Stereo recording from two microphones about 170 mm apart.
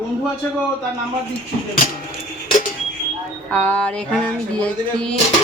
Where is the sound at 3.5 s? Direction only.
10° left (ahead or behind).